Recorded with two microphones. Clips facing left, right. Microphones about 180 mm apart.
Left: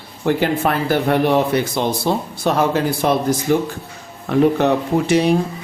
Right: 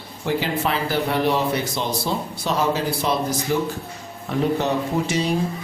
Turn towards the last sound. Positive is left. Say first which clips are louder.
# left 6 dB
turn(degrees=60)  # may be behind; listen again after turning